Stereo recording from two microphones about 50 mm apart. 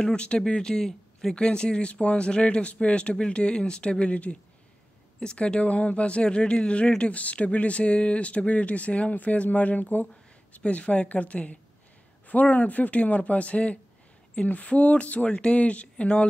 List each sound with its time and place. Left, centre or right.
0.1 s speech: left